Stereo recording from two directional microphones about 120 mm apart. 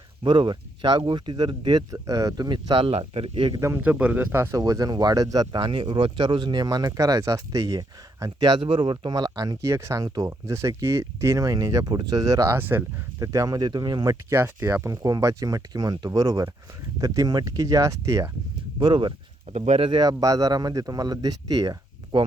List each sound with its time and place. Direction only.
0.2 s speech: 40° right (ahead or behind)
2.7 s speech: 50° right (ahead or behind)
3.6 s speech: 25° right (ahead or behind)
3.8 s speech: 10° right (ahead or behind); by 9.6 s 35° right (ahead or behind)
9.6 s speech: 25° right (ahead or behind)
13.1 s speech: 25° right (ahead or behind)
18.8 s speech: 40° right (ahead or behind)
19.5 s speech: 65° right (ahead or behind)
19.8 s speech: 40° right (ahead or behind)
22.1 s speech: 45° right (ahead or behind)